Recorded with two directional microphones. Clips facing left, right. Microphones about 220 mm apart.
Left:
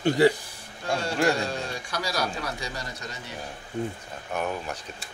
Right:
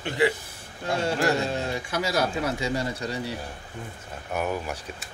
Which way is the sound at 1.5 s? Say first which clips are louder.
Right 4 dB; 25° right (ahead or behind).